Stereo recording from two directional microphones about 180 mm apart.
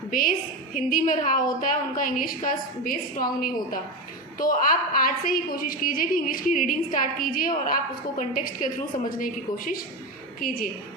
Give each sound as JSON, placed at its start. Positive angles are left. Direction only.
{"t": 0.1, "sound": "a woman's voice", "side_deg": 50}